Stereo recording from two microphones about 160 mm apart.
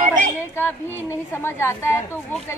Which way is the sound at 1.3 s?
15° left (ahead or behind).